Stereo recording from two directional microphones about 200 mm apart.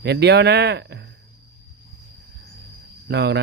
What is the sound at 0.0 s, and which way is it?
A man's voice, 55° right (ahead or behind).